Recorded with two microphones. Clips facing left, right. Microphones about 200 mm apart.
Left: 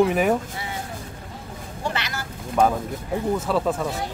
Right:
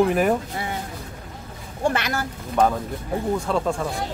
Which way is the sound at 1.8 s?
50° right (ahead or behind).